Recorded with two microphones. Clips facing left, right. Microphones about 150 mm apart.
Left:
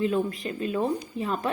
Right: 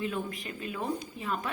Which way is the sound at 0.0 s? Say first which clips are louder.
Left 8 dB; 35° left (ahead or behind).